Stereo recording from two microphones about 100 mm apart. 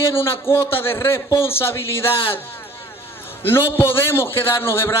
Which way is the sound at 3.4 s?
25° left (ahead or behind).